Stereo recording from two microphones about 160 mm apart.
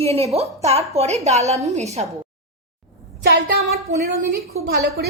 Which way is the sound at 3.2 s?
80° right.